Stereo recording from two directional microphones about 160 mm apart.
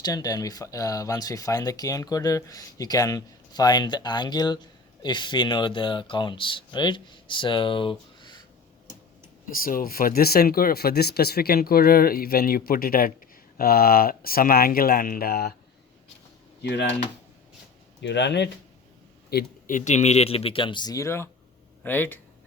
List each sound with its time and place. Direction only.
0.0 s speech: 25° left (ahead or behind)
9.6 s speech: 65° left (ahead or behind)
18.0 s speech: 90° left
19.3 s speech: 65° left (ahead or behind); by 22.2 s 10° left (ahead or behind)